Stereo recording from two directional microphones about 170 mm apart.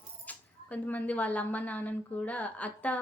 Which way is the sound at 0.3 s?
10° left (ahead or behind).